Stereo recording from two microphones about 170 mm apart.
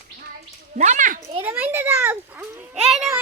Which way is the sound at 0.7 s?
45° right (ahead or behind).